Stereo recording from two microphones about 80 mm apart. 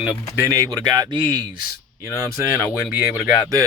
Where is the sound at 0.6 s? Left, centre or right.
Right.